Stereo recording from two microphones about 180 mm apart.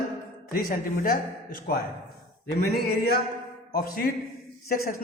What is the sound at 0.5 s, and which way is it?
A man's voice, 50° left (ahead or behind).